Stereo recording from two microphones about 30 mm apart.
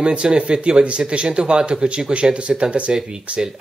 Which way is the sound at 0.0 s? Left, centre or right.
Right.